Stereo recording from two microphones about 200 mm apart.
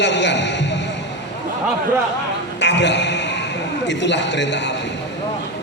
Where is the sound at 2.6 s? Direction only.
60° left (ahead or behind).